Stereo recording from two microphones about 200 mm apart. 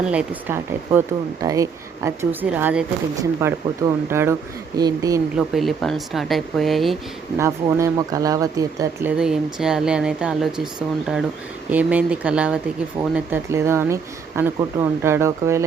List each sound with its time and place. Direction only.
0.0 s speech: 5° right (ahead or behind)
5.5 s speech: centre (ahead or behind)
7.3 s speech: 15° right (ahead or behind)